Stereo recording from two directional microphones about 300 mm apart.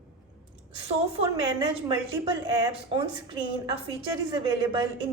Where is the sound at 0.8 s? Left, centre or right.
Centre.